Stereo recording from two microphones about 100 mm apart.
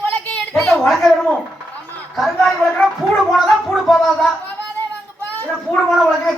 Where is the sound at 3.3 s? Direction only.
Centre (ahead or behind).